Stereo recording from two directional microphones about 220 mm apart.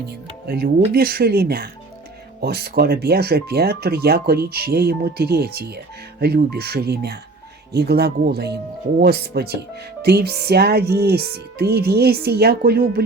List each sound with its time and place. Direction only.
0.4 s speech: 45° right (ahead or behind)